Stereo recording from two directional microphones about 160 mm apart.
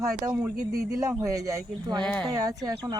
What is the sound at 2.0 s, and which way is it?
Speech, 5° left (ahead or behind).